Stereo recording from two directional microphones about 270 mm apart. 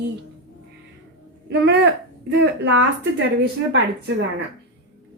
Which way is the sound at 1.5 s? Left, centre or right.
Right.